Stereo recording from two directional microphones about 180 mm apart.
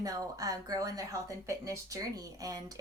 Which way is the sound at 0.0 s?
20° right (ahead or behind).